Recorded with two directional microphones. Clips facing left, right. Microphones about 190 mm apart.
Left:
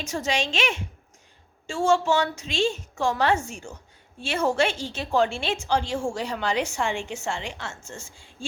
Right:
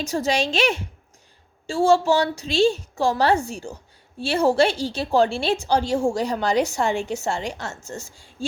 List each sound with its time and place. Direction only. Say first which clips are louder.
0.0 s a woman's voice: right 5 dB; 35° right (ahead or behind)